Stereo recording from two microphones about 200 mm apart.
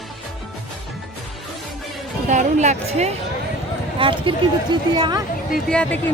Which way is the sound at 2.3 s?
35° right (ahead or behind).